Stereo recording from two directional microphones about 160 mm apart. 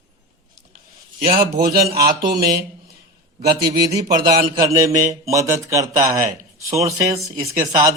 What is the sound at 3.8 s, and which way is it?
Speech, 20° right (ahead or behind).